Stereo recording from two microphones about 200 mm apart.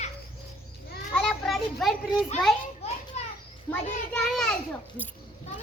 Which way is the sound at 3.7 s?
5° left (ahead or behind).